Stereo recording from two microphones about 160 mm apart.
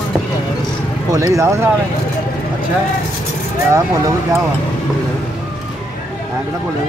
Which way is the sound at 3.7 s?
20° right (ahead or behind).